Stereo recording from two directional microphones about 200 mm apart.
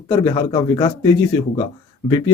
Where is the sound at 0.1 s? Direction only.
20° left (ahead or behind).